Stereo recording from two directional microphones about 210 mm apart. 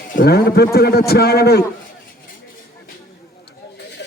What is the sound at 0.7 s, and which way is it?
Speech, 50° left (ahead or behind).